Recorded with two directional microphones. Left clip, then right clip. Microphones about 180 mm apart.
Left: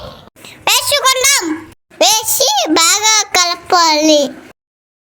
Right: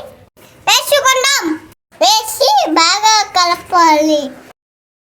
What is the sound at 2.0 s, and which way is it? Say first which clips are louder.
Child singing: right 1 dB; 35° left (ahead or behind).